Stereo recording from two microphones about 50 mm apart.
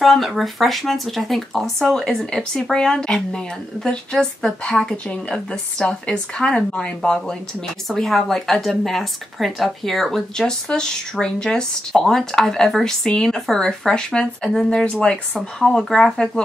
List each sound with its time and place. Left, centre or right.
0.0 s speech: centre
7.9 s speech: centre